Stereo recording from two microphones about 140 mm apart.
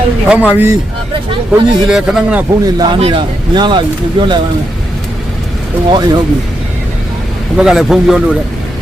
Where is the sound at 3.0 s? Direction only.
35° right (ahead or behind).